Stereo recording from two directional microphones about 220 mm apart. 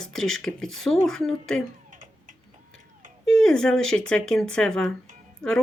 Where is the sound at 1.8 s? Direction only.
35° right (ahead or behind).